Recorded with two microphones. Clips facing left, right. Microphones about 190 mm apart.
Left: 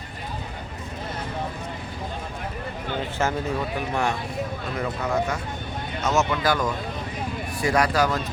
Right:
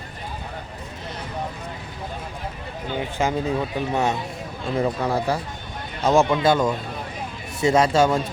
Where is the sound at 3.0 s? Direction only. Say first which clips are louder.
Right 3 dB; 15° right (ahead or behind).